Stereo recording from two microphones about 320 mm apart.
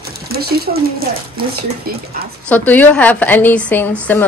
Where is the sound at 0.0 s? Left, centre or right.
Right.